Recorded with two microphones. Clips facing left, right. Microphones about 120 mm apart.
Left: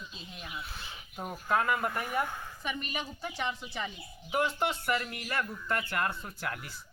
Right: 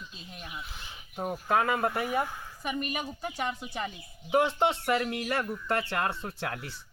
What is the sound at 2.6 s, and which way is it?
A woman's voice, 45° right (ahead or behind).